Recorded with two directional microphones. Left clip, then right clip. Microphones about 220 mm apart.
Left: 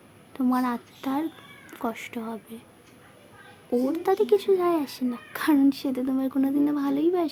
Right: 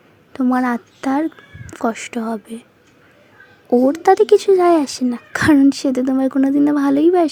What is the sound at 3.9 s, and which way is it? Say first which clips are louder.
A woman's voice: right 10 dB; 30° right (ahead or behind).